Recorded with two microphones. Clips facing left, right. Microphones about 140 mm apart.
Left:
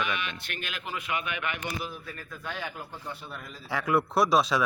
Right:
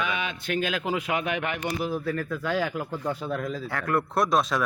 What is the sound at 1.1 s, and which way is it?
Speech, 40° right (ahead or behind).